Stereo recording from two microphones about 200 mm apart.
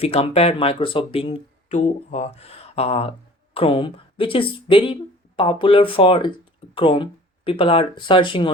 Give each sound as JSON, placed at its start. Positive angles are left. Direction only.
{"t": 0.0, "sound": "speech", "side_deg": 30}